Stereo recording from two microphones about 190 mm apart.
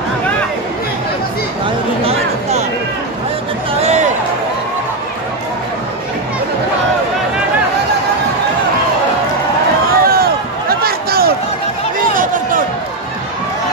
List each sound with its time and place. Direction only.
3.8 s music: 35° right (ahead or behind)
10.0 s run: 55° right (ahead or behind)